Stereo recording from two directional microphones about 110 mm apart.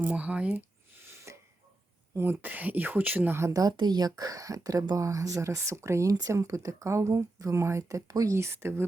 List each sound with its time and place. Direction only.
0.0 s speech: 10° right (ahead or behind)
1.3 s tick-tock: 25° right (ahead or behind)
2.1 s speech: 20° right (ahead or behind)